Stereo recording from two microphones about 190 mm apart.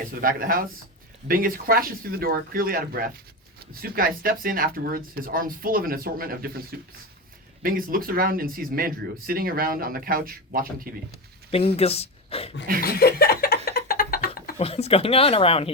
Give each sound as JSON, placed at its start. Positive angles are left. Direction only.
{"t": 0.2, "sound": "speech", "side_deg": -50}
{"t": 11.5, "sound": "speech", "side_deg": 30}
{"t": 12.8, "sound": "a sound", "side_deg": 55}
{"t": 14.6, "sound": "speech", "side_deg": 30}